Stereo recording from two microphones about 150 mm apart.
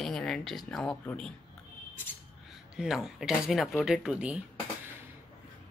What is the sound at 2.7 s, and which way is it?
Speech, 5° right (ahead or behind).